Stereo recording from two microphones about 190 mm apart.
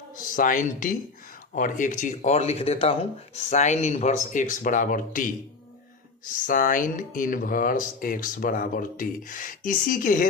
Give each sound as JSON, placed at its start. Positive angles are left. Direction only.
{"t": 0.1, "sound": "speech", "side_deg": 45}